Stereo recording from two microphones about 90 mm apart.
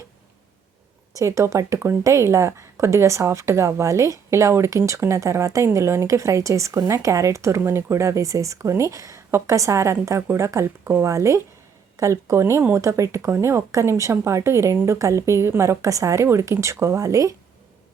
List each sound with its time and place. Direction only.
1.1 s speech: 35° right (ahead or behind)